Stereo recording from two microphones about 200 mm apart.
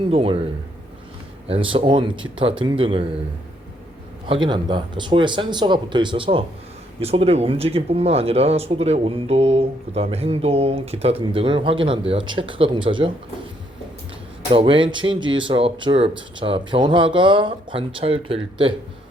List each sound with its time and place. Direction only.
0.1 s speech: 30° right (ahead or behind)
1.5 s speech: 25° right (ahead or behind)
4.3 s speech: 25° right (ahead or behind)
14.5 s speech: 25° right (ahead or behind)